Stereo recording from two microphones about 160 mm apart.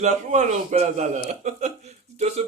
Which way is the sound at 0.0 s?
45° right (ahead or behind).